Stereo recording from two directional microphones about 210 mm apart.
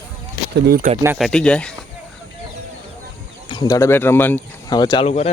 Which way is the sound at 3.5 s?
20° left (ahead or behind).